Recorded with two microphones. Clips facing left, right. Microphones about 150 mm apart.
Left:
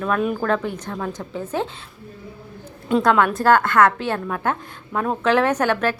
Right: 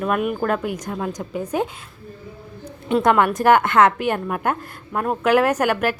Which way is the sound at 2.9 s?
20° right (ahead or behind).